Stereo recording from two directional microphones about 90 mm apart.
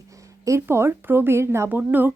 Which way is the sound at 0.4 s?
30° right (ahead or behind).